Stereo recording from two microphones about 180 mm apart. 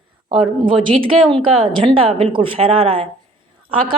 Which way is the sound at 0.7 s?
30° right (ahead or behind).